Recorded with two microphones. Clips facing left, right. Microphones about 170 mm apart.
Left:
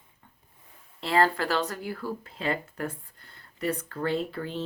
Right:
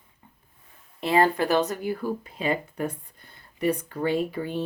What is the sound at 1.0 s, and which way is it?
Speech, 20° right (ahead or behind).